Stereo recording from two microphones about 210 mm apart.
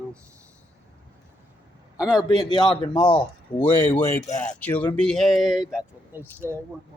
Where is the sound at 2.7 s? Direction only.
20° left (ahead or behind).